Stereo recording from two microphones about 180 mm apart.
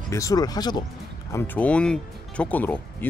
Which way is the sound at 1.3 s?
10° left (ahead or behind).